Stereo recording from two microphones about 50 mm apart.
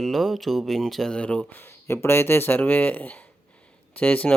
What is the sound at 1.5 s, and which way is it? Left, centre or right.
Speech, left.